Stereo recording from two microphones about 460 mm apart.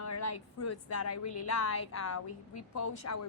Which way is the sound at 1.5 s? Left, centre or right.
Left.